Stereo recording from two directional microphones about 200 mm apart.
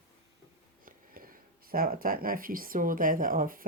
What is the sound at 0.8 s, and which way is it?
Speech, 45° right (ahead or behind).